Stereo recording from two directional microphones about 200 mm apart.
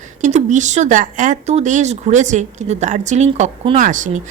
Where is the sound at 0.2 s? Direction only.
35° right (ahead or behind).